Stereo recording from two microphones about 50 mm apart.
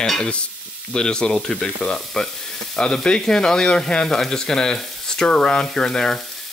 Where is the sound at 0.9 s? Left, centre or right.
Centre.